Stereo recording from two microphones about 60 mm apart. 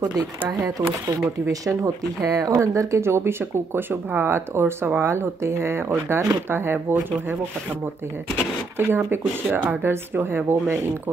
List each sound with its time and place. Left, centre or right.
0.5 s speech: right
1.5 s speech: right
8.7 s speech: right